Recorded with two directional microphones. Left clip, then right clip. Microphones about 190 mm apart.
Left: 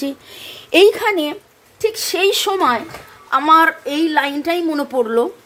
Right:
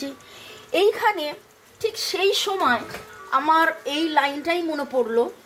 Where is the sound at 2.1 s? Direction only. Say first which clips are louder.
Left 5 dB; 40° left (ahead or behind).